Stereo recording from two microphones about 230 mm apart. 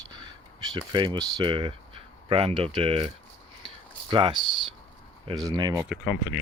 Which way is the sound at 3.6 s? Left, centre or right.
Right.